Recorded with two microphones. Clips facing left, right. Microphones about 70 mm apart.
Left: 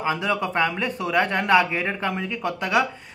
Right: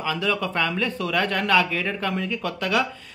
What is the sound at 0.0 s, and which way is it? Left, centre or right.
Speech, left.